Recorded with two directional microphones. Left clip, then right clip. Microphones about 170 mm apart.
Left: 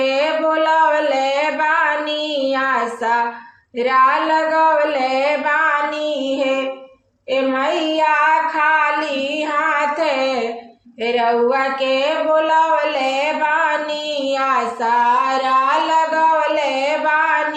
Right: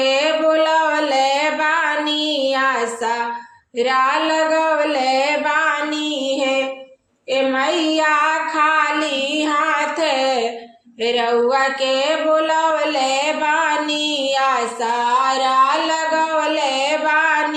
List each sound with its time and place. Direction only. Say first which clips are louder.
0.0 s music: right 1 dB; 35° right (ahead or behind)
2.5 s child singing: even; 35° right (ahead or behind)
3.8 s female singing: left 3 dB; 40° right (ahead or behind)
7.9 s child singing: left 4 dB; 35° right (ahead or behind)
9.6 s music: left 3 dB; 30° right (ahead or behind)
11.0 s a sound: left 1 dB; 35° right (ahead or behind)
15.3 s a sound: right 1 dB; 35° right (ahead or behind)
16.1 s music: left 3 dB; 35° right (ahead or behind)